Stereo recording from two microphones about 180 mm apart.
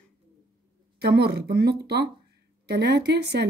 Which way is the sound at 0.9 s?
60° right (ahead or behind).